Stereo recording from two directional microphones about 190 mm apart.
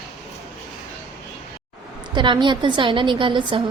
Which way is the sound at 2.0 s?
25° right (ahead or behind).